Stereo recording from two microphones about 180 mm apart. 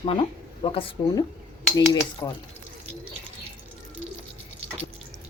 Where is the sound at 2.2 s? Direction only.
15° left (ahead or behind).